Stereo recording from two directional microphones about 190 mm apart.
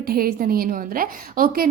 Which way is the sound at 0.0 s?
50° right (ahead or behind).